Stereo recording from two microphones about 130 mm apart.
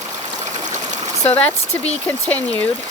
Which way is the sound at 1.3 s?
10° left (ahead or behind).